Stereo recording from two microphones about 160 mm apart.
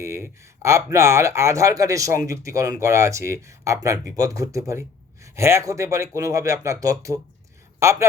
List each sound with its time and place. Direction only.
0.0 s a man's voice: 20° right (ahead or behind)